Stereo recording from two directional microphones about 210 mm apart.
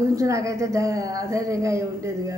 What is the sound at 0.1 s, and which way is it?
A woman's voice, 15° right (ahead or behind).